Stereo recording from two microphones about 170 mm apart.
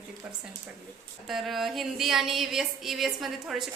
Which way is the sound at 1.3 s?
Centre (ahead or behind).